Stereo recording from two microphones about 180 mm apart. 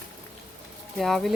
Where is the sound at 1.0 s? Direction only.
Centre (ahead or behind).